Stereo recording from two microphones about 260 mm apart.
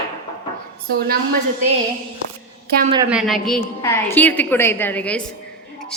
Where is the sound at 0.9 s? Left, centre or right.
Right.